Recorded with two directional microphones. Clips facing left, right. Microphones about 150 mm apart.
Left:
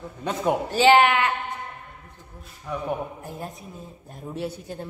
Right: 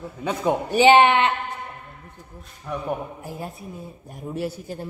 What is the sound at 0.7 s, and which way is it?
Speech, 20° right (ahead or behind).